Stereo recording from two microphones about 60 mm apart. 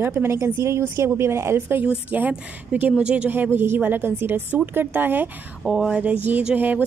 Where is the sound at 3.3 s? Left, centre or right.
Right.